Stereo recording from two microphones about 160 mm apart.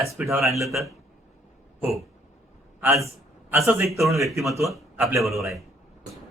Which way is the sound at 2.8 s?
15° right (ahead or behind).